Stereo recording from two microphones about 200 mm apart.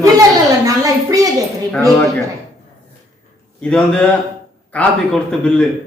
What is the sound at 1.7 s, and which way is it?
Speech, 5° left (ahead or behind).